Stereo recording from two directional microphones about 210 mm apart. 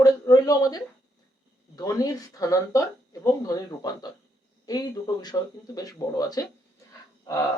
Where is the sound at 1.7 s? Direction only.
15° left (ahead or behind).